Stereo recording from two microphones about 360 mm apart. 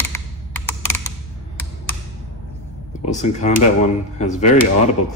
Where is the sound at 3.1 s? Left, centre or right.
Centre.